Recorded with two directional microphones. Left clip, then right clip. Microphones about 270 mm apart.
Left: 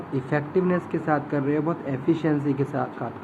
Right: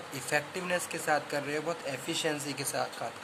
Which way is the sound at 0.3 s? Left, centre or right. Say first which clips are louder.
Left 6 dB; right.